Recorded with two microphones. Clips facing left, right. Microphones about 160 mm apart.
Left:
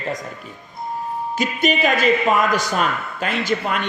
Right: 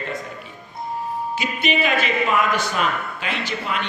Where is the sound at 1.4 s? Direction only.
40° left (ahead or behind).